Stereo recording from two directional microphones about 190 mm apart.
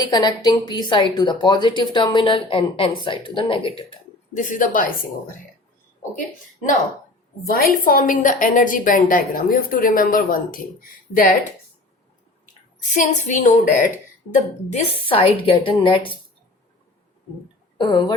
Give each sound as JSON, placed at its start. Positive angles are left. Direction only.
{"t": 0.0, "sound": "a woman's voice", "side_deg": 20}
{"t": 4.4, "sound": "a woman's voice", "side_deg": 45}
{"t": 7.4, "sound": "a woman's voice", "side_deg": 50}
{"t": 12.8, "sound": "a woman's voice", "side_deg": 40}
{"t": 14.7, "sound": "a woman's voice", "side_deg": 30}
{"t": 17.7, "sound": "speech", "side_deg": 25}